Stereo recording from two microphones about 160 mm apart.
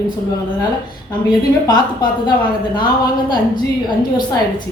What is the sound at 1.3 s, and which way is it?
A woman's voice, 25° left (ahead or behind).